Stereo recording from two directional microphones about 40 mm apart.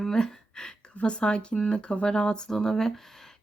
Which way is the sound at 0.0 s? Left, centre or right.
Centre.